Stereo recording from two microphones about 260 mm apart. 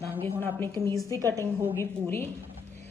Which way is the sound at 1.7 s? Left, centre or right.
Centre.